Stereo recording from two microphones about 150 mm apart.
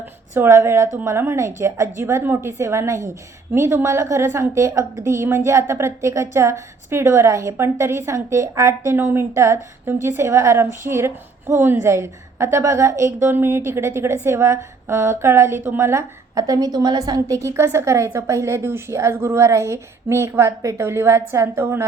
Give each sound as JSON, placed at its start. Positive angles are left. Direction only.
{"t": 0.3, "sound": "a woman's voice", "side_deg": -15}